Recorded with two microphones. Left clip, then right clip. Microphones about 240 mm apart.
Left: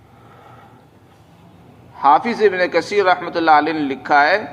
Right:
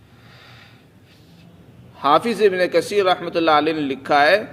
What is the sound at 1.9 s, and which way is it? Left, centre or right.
A man's voice, right.